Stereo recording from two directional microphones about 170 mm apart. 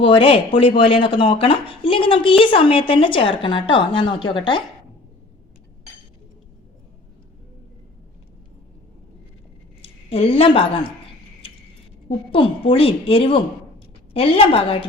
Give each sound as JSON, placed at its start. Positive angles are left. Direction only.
{"t": 0.0, "sound": "a woman's voice", "side_deg": 30}
{"t": 9.8, "sound": "a woman's voice", "side_deg": 35}
{"t": 12.0, "sound": "speech", "side_deg": 30}